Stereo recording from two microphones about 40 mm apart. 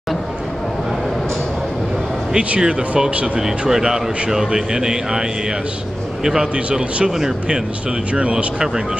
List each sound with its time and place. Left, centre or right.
2.3 s speech: right
3.6 s speech: centre
6.2 s speech: centre
6.5 s speech: right
7.1 s speech: centre
8.1 s speech: right